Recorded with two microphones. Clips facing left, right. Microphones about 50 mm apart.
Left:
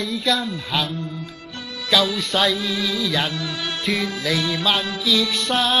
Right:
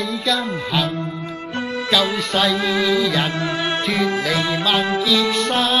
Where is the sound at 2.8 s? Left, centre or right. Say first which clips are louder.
Right 3 dB; centre.